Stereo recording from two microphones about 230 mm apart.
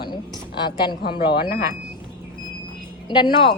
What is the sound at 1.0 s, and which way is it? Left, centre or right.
Speech, left.